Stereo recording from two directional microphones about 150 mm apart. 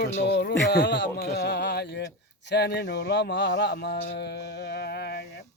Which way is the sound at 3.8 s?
90° left.